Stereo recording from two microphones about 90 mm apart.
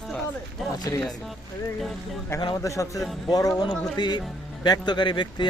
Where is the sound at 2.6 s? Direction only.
35° left (ahead or behind).